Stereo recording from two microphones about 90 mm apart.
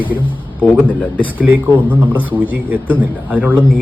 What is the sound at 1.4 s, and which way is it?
Speech, 20° right (ahead or behind).